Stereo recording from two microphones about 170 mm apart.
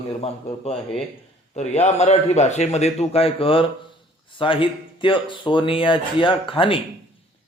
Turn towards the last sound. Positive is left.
turn(degrees=30)  # may be behind; listen again after turning